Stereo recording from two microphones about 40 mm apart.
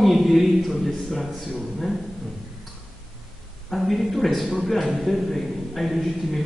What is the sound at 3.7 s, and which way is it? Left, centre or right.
A man's voice, centre.